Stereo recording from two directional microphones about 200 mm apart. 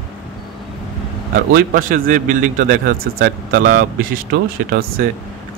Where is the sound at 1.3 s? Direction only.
45° right (ahead or behind).